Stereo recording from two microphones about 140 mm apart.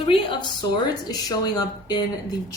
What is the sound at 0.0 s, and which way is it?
Speech, 40° left (ahead or behind).